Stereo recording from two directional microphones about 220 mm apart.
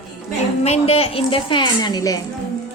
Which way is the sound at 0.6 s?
30° left (ahead or behind).